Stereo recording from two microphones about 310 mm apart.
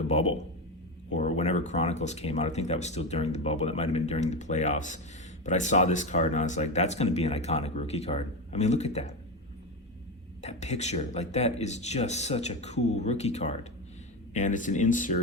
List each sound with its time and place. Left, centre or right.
0.1 s speech: left
10.4 s speech: left